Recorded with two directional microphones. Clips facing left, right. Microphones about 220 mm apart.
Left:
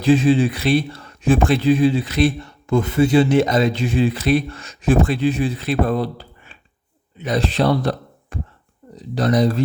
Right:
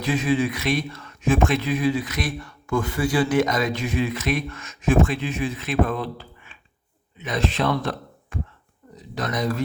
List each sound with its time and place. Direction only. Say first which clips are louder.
0.0 s speech: left 7 dB; 30° left (ahead or behind)